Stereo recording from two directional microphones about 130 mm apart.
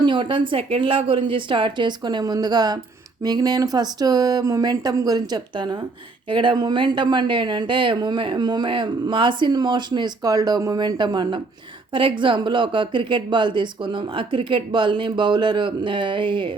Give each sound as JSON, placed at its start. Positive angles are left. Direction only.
{"t": 0.0, "sound": "speech", "side_deg": -35}